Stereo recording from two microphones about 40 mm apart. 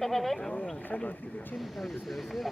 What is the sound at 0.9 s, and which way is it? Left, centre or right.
Speech, left.